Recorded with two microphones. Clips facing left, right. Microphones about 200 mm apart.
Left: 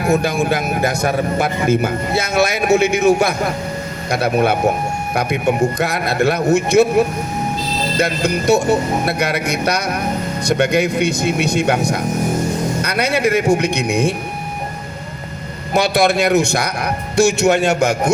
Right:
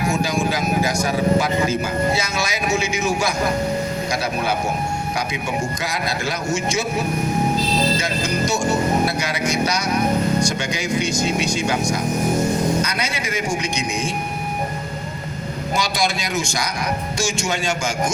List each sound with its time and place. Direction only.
0.0 s speech: 60° left (ahead or behind)
15.7 s speech: 60° left (ahead or behind)